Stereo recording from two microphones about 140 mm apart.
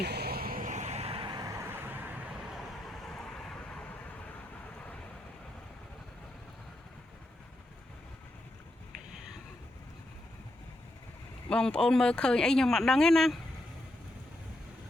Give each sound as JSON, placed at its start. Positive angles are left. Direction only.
{"t": 0.3, "sound": "vehicle", "side_deg": -90}
{"t": 2.6, "sound": "vehicle", "side_deg": 0}
{"t": 11.4, "sound": "speech", "side_deg": 5}